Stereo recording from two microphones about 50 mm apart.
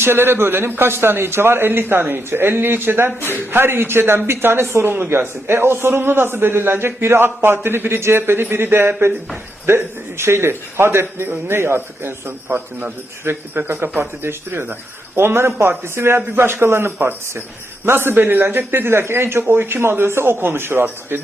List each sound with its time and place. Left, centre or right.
0.0 s a man's voice: right
4.9 s a man's voice: right
12.5 s a man's voice: right
13.2 s a man's voice: right